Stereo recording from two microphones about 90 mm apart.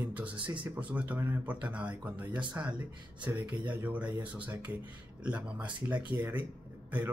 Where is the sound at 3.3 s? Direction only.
30° right (ahead or behind).